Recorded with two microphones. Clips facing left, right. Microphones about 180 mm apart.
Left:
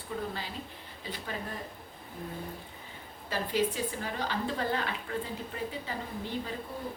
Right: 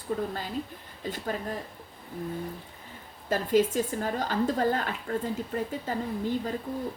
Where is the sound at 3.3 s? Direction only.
45° right (ahead or behind).